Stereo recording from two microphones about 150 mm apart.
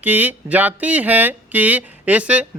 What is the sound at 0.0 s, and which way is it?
Speech, 10° right (ahead or behind).